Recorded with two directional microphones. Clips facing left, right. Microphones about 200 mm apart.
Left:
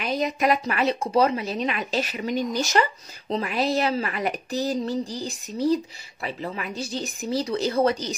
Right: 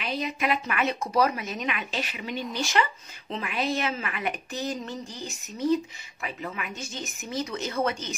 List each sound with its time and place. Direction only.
0.0 s speech: 40° left (ahead or behind)